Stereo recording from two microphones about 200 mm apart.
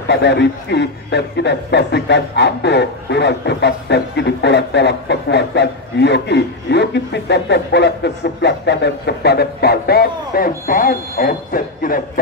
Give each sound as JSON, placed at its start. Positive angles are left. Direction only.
{"t": 0.1, "sound": "a man's voice", "side_deg": 60}